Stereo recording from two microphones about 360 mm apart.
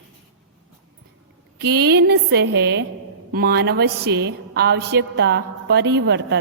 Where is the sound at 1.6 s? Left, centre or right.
Right.